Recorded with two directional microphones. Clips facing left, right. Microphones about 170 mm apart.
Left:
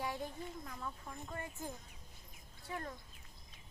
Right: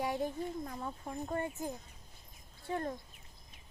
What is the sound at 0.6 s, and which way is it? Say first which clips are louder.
Speech: right 5 dB; 35° right (ahead or behind).